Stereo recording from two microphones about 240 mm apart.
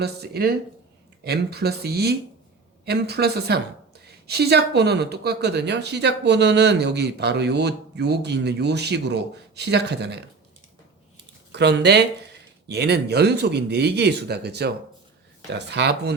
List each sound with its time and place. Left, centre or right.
0.0 s speech: right
11.5 s speech: right